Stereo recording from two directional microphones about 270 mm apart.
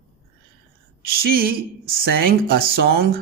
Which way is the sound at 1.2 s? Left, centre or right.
Right.